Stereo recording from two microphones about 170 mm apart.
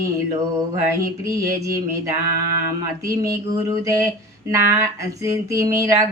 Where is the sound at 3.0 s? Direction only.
15° right (ahead or behind).